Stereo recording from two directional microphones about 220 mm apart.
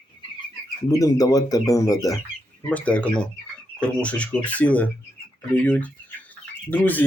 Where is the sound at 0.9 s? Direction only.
15° left (ahead or behind).